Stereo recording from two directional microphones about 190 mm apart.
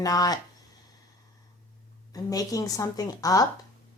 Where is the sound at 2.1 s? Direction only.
20° left (ahead or behind).